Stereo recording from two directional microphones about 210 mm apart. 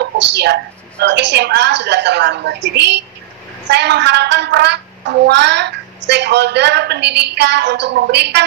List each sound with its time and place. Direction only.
0.0 s a woman's voice: 55° right (ahead or behind)